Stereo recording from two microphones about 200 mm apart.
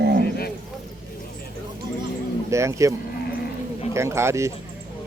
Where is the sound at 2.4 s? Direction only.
15° right (ahead or behind).